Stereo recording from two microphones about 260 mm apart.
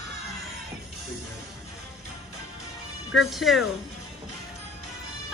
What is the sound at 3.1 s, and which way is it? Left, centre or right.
Speech, centre.